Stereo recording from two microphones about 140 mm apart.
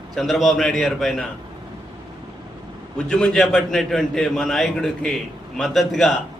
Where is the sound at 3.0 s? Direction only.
5° left (ahead or behind).